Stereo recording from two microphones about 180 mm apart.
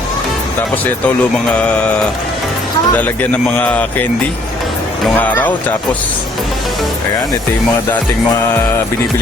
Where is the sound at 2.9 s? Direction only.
10° left (ahead or behind).